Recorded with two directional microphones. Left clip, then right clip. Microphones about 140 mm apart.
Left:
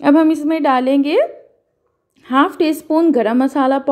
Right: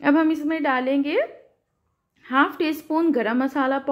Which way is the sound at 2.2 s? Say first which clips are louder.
Left 6 dB; 30° left (ahead or behind).